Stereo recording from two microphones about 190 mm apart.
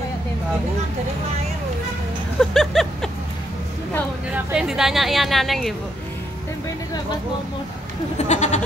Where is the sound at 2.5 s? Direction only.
Centre (ahead or behind).